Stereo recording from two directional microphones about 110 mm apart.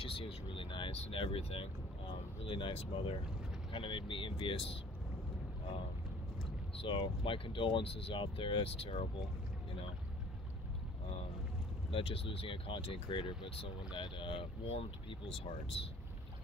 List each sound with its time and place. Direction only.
0.0 s speech: 55° left (ahead or behind)
6.8 s speech: 50° left (ahead or behind)
11.9 s speech: 60° left (ahead or behind)